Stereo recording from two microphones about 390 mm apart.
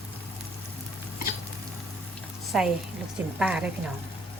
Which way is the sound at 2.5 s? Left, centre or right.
Centre.